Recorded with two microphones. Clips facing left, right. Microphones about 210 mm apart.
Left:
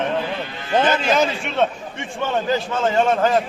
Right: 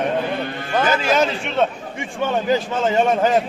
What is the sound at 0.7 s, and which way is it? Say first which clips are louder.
Speech: left 2 dB; 20° left (ahead or behind).